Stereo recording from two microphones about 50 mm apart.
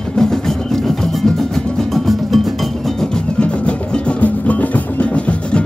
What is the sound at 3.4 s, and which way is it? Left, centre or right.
Music, left.